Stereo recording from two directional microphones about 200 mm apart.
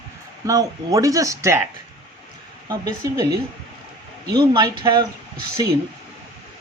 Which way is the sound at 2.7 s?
15° right (ahead or behind).